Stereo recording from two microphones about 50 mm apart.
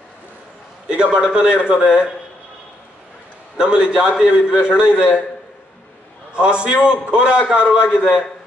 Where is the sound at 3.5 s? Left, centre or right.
Centre.